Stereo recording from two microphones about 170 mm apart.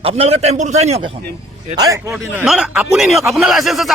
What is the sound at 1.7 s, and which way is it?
Speech, 20° right (ahead or behind).